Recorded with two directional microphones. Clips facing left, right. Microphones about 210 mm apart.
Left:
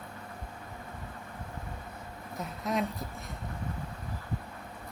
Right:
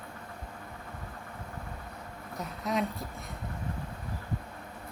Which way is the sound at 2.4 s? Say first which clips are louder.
Even; centre (ahead or behind).